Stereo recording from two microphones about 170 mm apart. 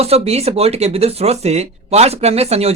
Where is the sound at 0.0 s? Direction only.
35° right (ahead or behind).